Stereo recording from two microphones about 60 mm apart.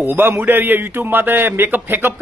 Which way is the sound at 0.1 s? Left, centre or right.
Right.